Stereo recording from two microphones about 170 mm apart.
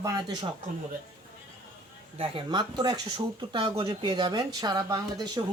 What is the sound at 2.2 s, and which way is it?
Speech, 30° right (ahead or behind).